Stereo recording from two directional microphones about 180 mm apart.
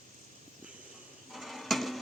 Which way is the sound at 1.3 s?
Centre (ahead or behind).